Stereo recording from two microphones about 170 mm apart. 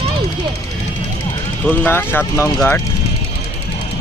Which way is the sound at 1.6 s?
10° left (ahead or behind).